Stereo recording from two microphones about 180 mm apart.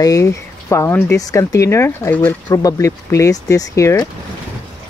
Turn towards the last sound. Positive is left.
turn(degrees=15)  # may be behind; listen again after turning